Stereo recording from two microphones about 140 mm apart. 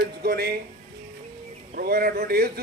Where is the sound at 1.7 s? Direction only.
90° right.